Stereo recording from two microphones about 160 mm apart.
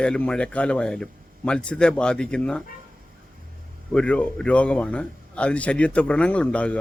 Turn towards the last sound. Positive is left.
turn(degrees=10)  # may be behind; listen again after turning